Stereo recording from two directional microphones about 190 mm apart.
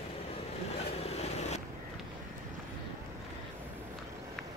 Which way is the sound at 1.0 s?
35° left (ahead or behind).